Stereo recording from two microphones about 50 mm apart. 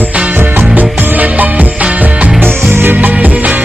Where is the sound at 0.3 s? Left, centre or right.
Right.